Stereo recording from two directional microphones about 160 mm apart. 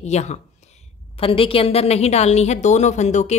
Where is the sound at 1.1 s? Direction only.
35° left (ahead or behind).